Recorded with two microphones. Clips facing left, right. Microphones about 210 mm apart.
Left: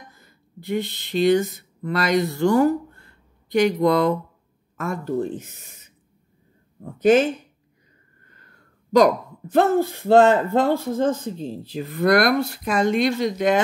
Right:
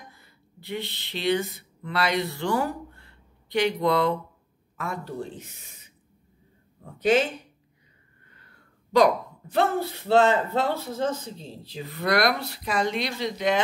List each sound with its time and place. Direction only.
0.1 s speech: 45° left (ahead or behind)
7.0 s speech: 45° left (ahead or behind)
8.9 s speech: 45° left (ahead or behind)